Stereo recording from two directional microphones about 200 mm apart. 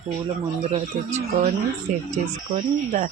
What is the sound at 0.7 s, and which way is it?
Speech, 35° right (ahead or behind).